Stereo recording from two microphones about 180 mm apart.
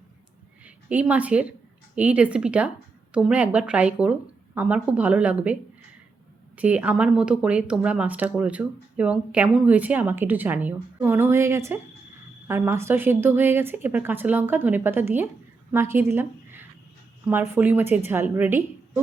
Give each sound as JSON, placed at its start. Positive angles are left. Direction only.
{"t": 0.6, "sound": "a woman's voice", "side_deg": -10}
{"t": 6.6, "sound": "a woman's voice", "side_deg": -10}